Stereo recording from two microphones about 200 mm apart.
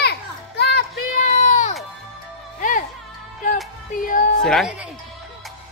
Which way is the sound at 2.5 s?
40° left (ahead or behind).